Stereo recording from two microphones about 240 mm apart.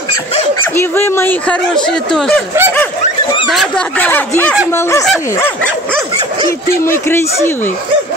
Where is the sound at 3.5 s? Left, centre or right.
Centre.